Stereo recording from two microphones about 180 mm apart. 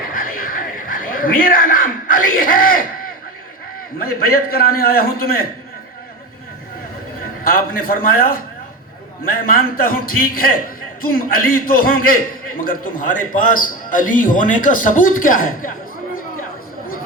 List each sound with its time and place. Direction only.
0.1 s a sound: 50° left (ahead or behind)
3.9 s a man's voice: 55° left (ahead or behind)
7.7 s a man's voice: 55° left (ahead or behind)
9.5 s a man's voice: 55° left (ahead or behind)